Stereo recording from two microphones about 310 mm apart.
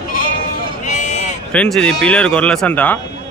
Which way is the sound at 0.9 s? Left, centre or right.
Left.